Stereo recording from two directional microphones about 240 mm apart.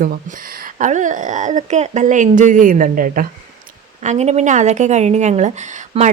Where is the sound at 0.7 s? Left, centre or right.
Right.